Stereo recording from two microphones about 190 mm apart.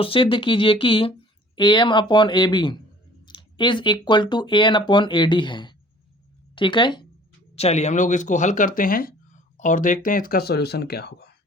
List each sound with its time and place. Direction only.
0.0 s speech: 25° left (ahead or behind); by 11.3 s 60° left (ahead or behind)